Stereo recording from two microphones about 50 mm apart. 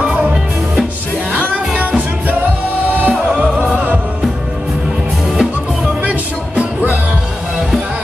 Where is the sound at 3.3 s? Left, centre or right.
Right.